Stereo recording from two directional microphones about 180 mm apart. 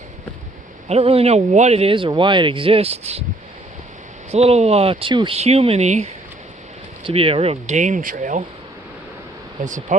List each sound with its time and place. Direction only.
0.9 s speech: 35° right (ahead or behind)
4.3 s speech: 35° right (ahead or behind)
9.6 s speech: 45° right (ahead or behind)